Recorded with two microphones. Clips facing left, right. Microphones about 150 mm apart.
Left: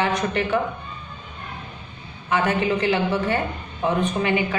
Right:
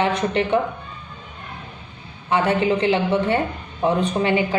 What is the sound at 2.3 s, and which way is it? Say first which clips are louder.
Speech: right 2 dB; 30° right (ahead or behind).